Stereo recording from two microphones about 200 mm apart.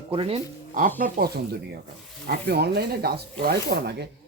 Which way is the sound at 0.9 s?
45° right (ahead or behind).